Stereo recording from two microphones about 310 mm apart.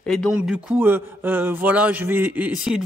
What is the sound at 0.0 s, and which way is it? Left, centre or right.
A man's voice, centre.